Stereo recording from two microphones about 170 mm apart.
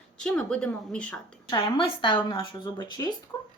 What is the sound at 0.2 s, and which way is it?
Speech, 5° left (ahead or behind).